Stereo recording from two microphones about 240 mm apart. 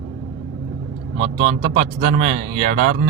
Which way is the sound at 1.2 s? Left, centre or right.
Right.